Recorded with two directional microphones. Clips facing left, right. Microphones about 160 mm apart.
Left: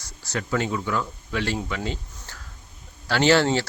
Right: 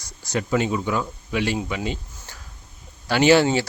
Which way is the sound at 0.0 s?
15° right (ahead or behind).